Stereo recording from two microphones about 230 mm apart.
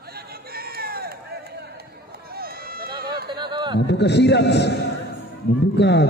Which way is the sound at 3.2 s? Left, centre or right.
Centre.